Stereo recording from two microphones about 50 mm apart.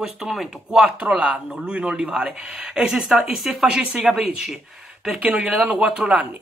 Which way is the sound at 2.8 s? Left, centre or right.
Centre.